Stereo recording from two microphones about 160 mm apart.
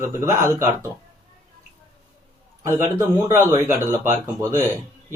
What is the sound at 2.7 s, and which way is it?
A man's voice, 15° right (ahead or behind).